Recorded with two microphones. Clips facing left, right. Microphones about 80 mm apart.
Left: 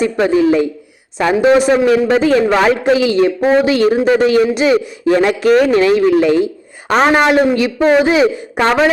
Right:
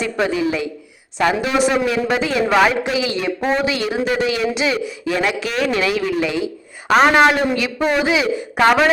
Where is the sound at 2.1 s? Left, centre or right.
Left.